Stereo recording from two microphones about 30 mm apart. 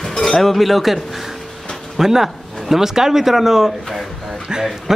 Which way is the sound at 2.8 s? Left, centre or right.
Centre.